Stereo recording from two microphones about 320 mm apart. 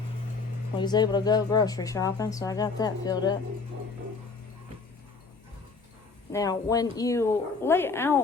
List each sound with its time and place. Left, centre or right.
0.8 s speech: centre
6.3 s speech: centre